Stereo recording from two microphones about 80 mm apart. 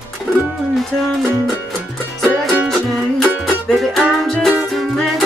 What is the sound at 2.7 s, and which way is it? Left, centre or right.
Music, centre.